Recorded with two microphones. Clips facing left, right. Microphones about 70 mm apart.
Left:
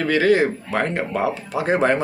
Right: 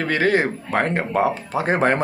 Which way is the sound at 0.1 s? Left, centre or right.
Right.